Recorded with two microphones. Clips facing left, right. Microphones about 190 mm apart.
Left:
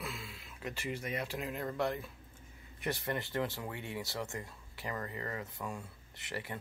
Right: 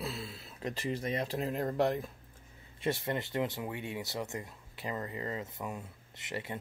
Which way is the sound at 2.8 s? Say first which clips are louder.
Right 3 dB; 25° right (ahead or behind).